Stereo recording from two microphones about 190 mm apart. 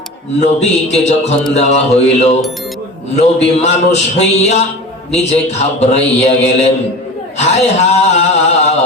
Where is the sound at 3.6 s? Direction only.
35° left (ahead or behind).